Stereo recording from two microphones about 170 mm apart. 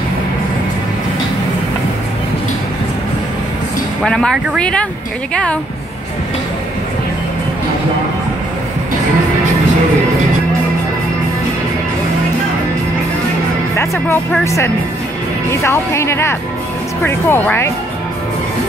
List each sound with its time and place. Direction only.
4.0 s speech: 5° left (ahead or behind)
13.7 s speech: 15° left (ahead or behind)